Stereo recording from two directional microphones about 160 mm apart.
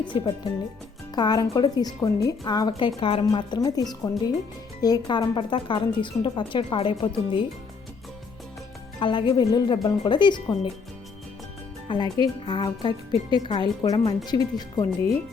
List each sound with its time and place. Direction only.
0.1 s speech: 30° left (ahead or behind)
9.0 s speech: 30° left (ahead or behind)
11.9 s speech: 25° left (ahead or behind)